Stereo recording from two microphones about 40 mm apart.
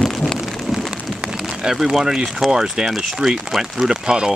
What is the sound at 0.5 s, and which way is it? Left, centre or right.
Rain on surface, centre.